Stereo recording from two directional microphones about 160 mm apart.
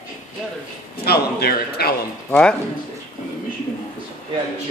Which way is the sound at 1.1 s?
80° left.